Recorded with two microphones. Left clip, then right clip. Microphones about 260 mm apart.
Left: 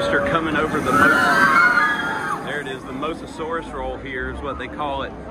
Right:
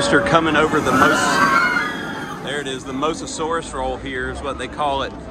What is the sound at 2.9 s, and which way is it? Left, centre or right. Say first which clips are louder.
Speech: right 6 dB; centre.